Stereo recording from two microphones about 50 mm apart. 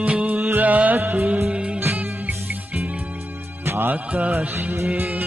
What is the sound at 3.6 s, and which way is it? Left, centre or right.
Music, right.